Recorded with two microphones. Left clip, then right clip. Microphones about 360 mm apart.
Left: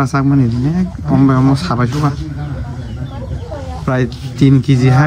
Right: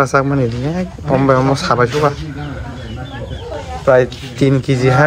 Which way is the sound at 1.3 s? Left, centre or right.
Centre.